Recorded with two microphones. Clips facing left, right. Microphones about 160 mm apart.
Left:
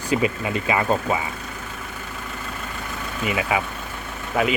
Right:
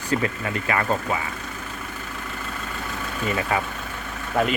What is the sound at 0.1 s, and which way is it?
Speech, 15° left (ahead or behind).